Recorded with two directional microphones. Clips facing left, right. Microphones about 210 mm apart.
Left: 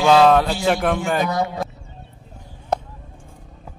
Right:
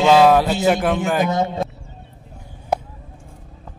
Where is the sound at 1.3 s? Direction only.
25° right (ahead or behind).